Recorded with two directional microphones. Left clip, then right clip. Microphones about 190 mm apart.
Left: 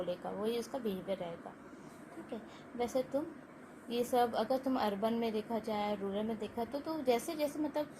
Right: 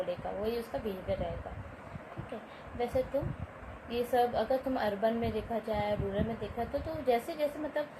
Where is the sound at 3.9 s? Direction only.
35° left (ahead or behind).